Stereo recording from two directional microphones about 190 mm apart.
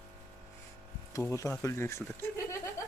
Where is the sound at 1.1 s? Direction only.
15° left (ahead or behind).